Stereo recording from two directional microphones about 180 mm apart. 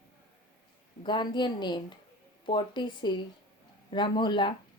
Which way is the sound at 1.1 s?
25° left (ahead or behind).